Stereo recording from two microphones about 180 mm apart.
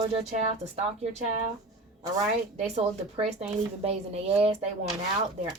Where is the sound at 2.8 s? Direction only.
35° right (ahead or behind).